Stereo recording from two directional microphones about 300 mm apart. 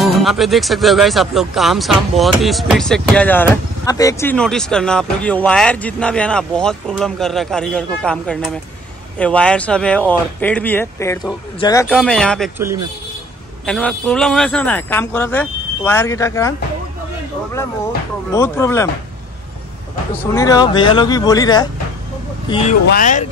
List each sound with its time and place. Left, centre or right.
0.0 s speech: centre
13.7 s speech: centre
18.3 s speech: centre
20.3 s speech: centre